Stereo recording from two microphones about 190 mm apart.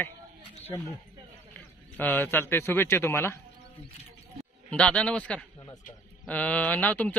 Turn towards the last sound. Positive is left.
turn(degrees=10)  # may be behind; listen again after turning